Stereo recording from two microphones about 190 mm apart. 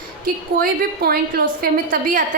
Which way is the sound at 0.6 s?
50° right (ahead or behind).